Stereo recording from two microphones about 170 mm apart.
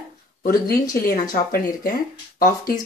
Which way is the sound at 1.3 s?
55° left (ahead or behind).